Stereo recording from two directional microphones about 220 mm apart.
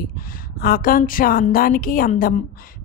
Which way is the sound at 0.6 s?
40° left (ahead or behind).